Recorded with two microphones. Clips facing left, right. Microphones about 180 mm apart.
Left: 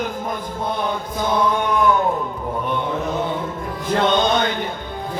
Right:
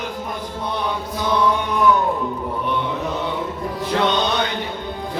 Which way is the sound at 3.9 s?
50° left (ahead or behind).